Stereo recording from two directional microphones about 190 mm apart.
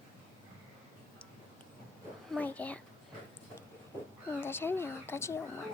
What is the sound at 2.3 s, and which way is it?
Child singing, 10° left (ahead or behind).